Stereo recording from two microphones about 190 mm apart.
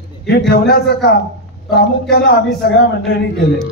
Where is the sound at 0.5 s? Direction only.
55° left (ahead or behind).